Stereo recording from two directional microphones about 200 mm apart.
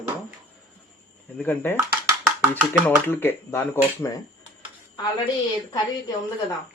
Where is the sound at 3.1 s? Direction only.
10° left (ahead or behind).